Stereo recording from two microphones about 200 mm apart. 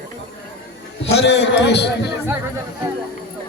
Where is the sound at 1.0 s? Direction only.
60° left (ahead or behind).